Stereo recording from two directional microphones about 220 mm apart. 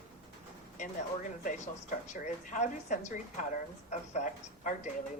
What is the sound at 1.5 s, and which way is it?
A woman's voice, 35° left (ahead or behind).